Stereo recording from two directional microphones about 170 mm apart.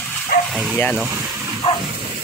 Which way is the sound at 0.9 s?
10° right (ahead or behind).